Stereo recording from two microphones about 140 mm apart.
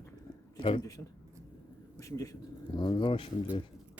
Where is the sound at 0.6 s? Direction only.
40° left (ahead or behind).